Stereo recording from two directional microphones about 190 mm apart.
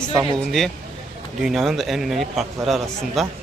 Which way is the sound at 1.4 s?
Centre (ahead or behind).